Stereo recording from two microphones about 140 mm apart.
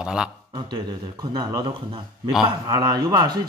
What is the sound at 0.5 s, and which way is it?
Speech, 30° right (ahead or behind).